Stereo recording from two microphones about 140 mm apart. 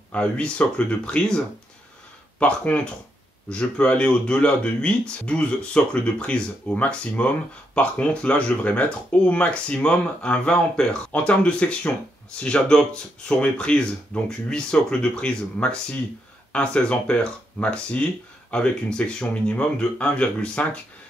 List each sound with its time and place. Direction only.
0.1 s speech: 10° left (ahead or behind)
2.4 s speech: 10° left (ahead or behind)